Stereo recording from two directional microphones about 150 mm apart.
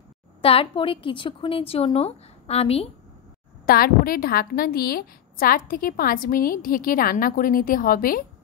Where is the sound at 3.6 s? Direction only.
75° left (ahead or behind).